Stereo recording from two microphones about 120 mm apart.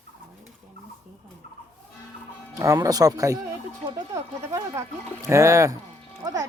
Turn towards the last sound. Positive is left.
turn(degrees=-30)  # may be behind; listen again after turning